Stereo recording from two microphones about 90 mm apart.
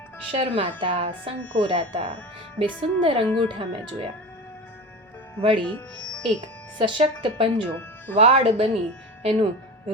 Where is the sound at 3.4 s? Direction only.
90° right.